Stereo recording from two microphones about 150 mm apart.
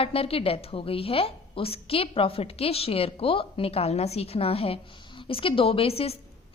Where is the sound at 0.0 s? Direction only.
40° left (ahead or behind).